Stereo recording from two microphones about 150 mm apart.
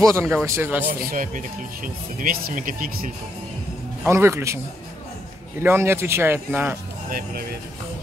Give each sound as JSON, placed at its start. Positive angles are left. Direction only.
{"t": 0.0, "sound": "speech", "side_deg": -20}
{"t": 0.8, "sound": "speech", "side_deg": -65}
{"t": 4.0, "sound": "speech", "side_deg": -20}
{"t": 5.6, "sound": "speech", "side_deg": -15}
{"t": 7.1, "sound": "speech", "side_deg": -75}